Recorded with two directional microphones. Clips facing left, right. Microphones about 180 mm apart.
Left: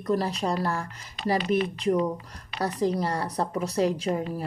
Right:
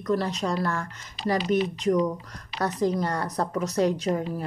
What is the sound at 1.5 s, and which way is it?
Speech, 35° right (ahead or behind).